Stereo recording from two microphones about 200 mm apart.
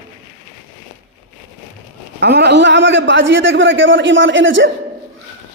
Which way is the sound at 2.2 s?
55° right (ahead or behind).